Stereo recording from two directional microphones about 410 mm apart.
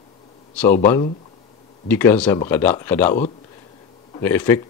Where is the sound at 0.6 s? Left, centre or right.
Centre.